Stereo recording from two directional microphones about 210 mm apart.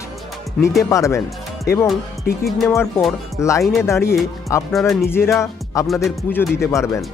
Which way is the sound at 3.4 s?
15° left (ahead or behind).